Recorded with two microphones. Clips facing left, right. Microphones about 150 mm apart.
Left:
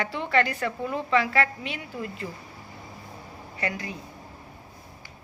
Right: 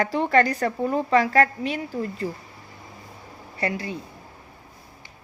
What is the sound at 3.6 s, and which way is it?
Speech, 30° right (ahead or behind).